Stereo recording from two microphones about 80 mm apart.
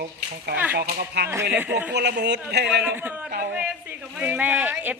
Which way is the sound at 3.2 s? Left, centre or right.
Centre.